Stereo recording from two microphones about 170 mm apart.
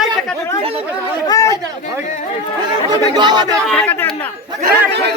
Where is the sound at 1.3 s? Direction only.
20° left (ahead or behind).